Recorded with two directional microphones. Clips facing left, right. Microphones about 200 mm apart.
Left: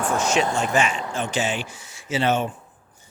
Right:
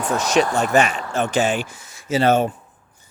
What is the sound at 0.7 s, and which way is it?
Speech, 65° right (ahead or behind).